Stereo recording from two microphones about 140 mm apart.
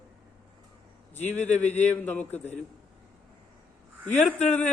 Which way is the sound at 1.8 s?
10° left (ahead or behind).